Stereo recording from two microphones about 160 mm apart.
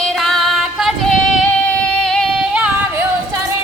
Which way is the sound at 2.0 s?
5° left (ahead or behind).